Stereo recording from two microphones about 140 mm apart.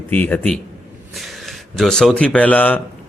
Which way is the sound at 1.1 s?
Centre (ahead or behind).